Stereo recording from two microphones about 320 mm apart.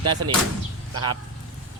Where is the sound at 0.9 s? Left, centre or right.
Right.